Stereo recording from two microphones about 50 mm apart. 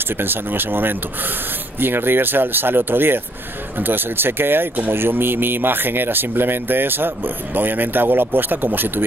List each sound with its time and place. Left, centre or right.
0.2 s speech: right